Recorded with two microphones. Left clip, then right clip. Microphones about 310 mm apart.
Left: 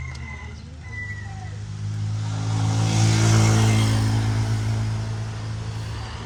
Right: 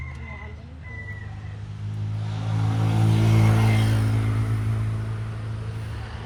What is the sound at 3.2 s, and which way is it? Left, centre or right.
Vehicle, left.